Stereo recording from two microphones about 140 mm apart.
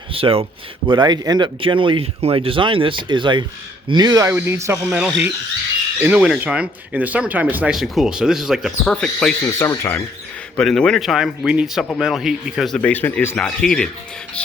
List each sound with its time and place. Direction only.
0.1 s speech: 40° right (ahead or behind); by 4.9 s 20° right (ahead or behind)
4.9 s speech: 5° right (ahead or behind)
9.6 s speech: 20° left (ahead or behind)
10.6 s speech: 5° left (ahead or behind)